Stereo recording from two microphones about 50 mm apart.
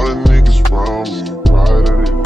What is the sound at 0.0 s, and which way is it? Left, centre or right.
Music, centre.